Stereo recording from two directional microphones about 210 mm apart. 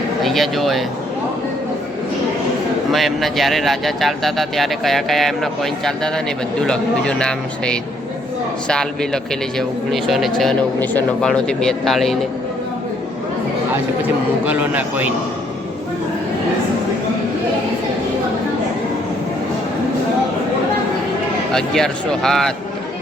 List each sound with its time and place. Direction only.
0.2 s speech: centre (ahead or behind)
2.9 s speech: centre (ahead or behind)
14.4 s a man's voice: 10° right (ahead or behind)
21.5 s speech: 5° left (ahead or behind)